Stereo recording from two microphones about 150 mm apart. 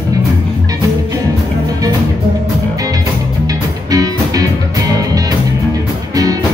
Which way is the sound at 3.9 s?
25° right (ahead or behind).